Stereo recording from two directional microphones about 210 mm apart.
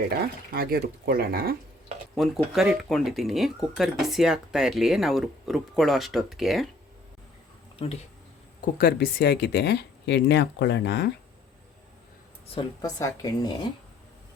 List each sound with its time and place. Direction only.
0.5 s speech: 45° right (ahead or behind)
2.1 s speech: centre (ahead or behind)
8.6 s speech: 45° left (ahead or behind)
12.5 s a woman's voice: 15° left (ahead or behind)